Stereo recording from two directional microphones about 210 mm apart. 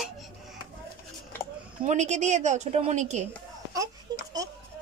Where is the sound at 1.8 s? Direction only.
35° right (ahead or behind).